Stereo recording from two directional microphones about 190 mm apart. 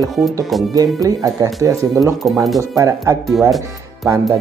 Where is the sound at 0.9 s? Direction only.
20° right (ahead or behind).